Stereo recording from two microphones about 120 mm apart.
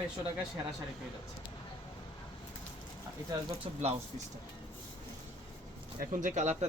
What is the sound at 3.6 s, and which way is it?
Speech, 50° right (ahead or behind).